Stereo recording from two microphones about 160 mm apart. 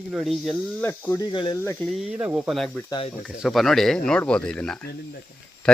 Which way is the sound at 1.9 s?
5° right (ahead or behind).